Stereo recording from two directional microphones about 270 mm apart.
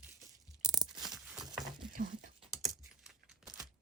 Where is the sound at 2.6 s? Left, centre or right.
Centre.